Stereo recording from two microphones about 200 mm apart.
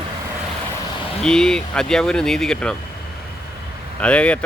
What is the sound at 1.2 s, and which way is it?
Speech, 5° left (ahead or behind).